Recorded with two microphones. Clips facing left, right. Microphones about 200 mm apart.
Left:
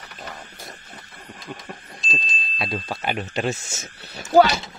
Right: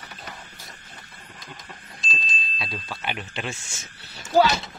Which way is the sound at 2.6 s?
50° left (ahead or behind).